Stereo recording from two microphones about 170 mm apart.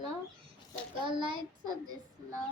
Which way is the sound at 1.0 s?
30° right (ahead or behind).